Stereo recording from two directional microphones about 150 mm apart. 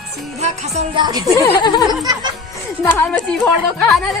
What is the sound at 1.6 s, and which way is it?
Speech, 30° left (ahead or behind).